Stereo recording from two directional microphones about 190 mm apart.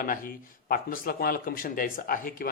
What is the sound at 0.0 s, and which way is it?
Speech, 45° left (ahead or behind).